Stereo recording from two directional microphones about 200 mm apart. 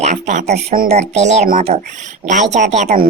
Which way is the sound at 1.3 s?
45° right (ahead or behind).